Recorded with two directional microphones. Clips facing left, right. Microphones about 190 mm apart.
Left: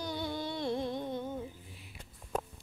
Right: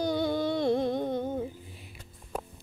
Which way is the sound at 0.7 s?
40° right (ahead or behind).